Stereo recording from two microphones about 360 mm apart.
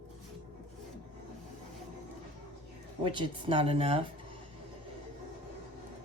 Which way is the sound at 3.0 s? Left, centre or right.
Centre.